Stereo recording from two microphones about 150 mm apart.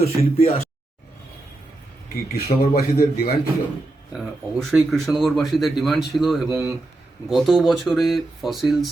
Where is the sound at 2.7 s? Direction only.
90° left.